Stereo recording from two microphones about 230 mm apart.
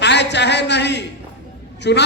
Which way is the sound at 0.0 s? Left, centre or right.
Left.